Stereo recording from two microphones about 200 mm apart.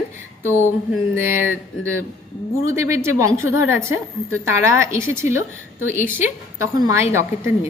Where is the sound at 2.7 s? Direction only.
15° right (ahead or behind).